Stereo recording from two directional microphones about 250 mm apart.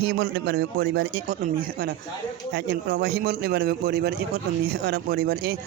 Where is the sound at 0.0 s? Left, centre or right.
Right.